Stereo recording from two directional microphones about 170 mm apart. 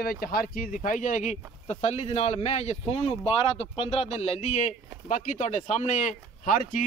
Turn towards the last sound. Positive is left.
turn(degrees=50)  # may be behind; listen again after turning